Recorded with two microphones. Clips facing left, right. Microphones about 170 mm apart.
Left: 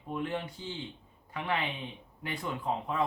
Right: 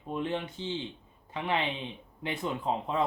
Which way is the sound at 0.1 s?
25° right (ahead or behind).